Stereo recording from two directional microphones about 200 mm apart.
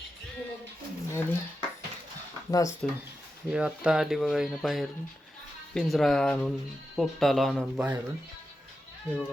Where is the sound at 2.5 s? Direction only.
15° left (ahead or behind).